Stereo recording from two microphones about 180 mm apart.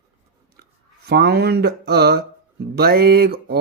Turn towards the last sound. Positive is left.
turn(degrees=-60)  # may be behind; listen again after turning